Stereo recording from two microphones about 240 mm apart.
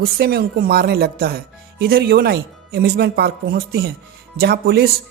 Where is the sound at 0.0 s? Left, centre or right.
Right.